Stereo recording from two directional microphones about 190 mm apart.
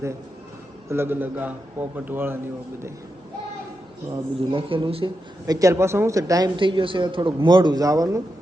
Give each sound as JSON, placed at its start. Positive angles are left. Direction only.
{"t": 0.9, "sound": "a man's voice", "side_deg": -10}
{"t": 4.1, "sound": "speech", "side_deg": -30}
{"t": 5.5, "sound": "speech", "side_deg": -15}